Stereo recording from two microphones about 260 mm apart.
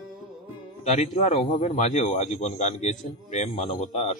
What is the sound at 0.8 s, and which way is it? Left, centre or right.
Speech, left.